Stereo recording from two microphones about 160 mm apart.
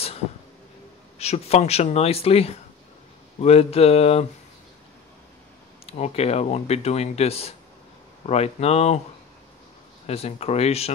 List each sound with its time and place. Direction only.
1.1 s speech: 40° left (ahead or behind)
5.9 s speech: 40° left (ahead or behind)
10.0 s speech: 40° left (ahead or behind)